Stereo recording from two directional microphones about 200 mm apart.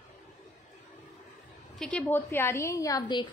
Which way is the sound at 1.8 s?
5° left (ahead or behind).